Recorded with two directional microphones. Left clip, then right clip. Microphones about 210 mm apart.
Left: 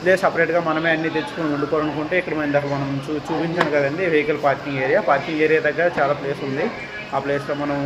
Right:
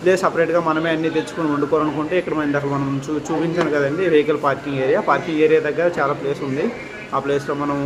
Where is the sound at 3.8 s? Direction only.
15° right (ahead or behind).